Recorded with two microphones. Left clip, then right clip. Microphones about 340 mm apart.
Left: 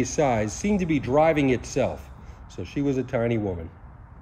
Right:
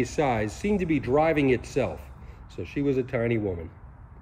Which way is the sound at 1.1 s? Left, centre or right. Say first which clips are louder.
Left 3 dB; centre.